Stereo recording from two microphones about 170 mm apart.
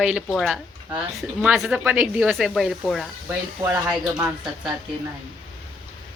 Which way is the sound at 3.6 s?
20° right (ahead or behind).